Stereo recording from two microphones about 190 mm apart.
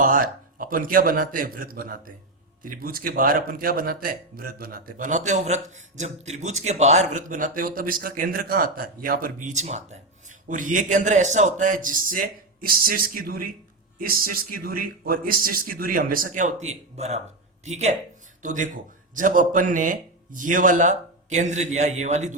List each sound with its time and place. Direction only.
0.0 s a man's voice: 45° right (ahead or behind)